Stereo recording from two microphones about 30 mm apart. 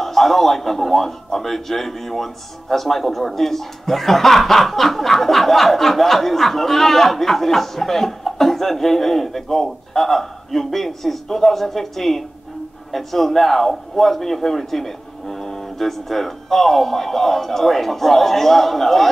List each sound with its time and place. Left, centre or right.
0.0 s a man's voice: centre